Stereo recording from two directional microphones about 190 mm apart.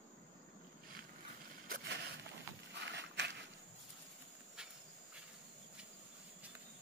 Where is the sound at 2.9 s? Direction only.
70° right (ahead or behind).